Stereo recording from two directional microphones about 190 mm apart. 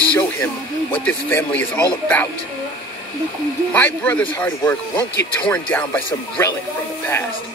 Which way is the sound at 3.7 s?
10° left (ahead or behind).